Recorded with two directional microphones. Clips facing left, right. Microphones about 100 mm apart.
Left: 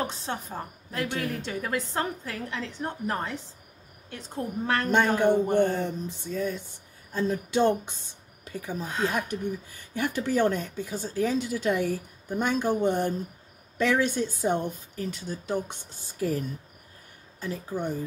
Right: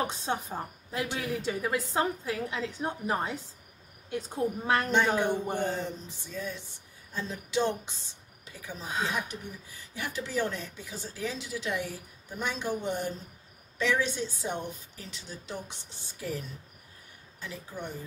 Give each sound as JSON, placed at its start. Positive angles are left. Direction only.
{"t": 0.0, "sound": "a woman's voice", "side_deg": -15}
{"t": 5.6, "sound": "speech", "side_deg": 55}